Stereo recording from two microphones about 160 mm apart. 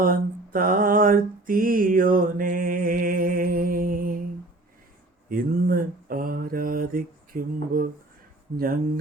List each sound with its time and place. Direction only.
0.0 s mantra: 60° right (ahead or behind)
5.3 s mantra: 60° right (ahead or behind)
8.5 s speech: 65° right (ahead or behind)